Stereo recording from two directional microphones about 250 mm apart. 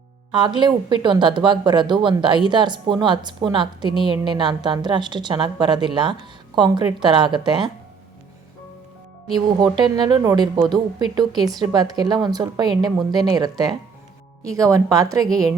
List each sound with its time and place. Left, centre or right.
0.3 s speech: centre
9.3 s a woman's voice: centre